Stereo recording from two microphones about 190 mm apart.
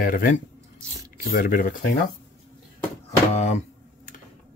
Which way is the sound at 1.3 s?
50° left (ahead or behind).